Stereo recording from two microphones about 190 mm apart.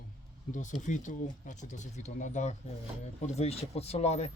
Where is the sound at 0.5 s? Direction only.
40° left (ahead or behind).